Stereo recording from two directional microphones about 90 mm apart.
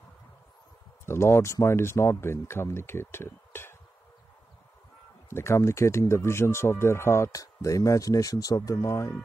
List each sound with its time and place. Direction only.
1.0 s speech: 30° left (ahead or behind)
5.3 s speech: 30° left (ahead or behind)